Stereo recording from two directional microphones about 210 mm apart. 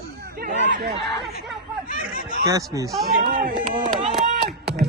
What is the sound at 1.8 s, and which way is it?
Speech, 40° left (ahead or behind).